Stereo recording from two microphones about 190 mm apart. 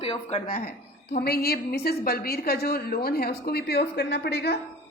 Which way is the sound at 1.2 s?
55° left (ahead or behind).